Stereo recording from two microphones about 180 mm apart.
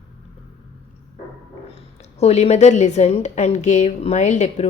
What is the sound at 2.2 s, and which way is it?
A woman's voice, 35° left (ahead or behind).